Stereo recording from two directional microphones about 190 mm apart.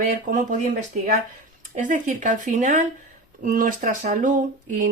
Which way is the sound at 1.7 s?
45° right (ahead or behind).